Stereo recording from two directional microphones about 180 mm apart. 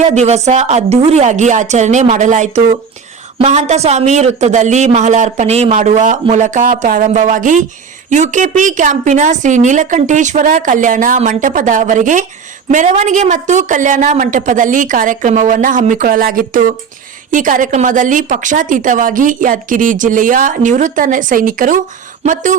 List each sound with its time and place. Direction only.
0.1 s a woman's voice: 40° right (ahead or behind)